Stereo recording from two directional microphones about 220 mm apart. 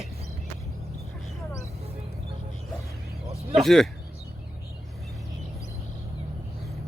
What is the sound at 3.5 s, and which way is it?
Speech, centre (ahead or behind).